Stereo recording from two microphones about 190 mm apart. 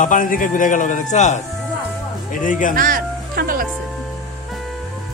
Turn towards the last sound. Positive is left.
turn(degrees=-50)  # may be behind; listen again after turning